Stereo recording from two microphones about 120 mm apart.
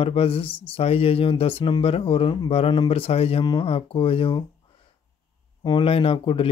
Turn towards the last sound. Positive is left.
turn(degrees=50)  # may be behind; listen again after turning